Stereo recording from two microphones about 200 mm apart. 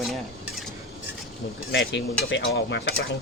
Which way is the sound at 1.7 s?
65° left (ahead or behind).